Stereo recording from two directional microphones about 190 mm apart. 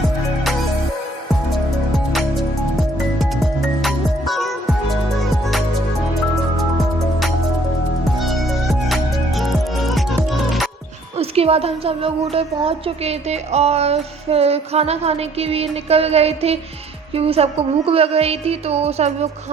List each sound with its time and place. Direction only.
3.2 s music: centre (ahead or behind)
6.7 s music: centre (ahead or behind)
11.2 s speech: 30° right (ahead or behind)